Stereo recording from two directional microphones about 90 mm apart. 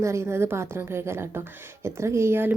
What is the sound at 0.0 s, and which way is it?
A woman's voice, 35° right (ahead or behind).